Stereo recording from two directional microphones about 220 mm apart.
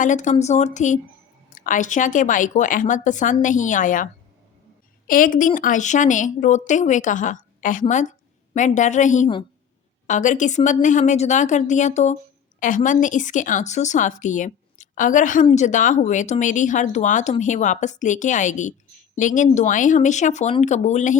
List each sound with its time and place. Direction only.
0.0 s speech: 35° left (ahead or behind)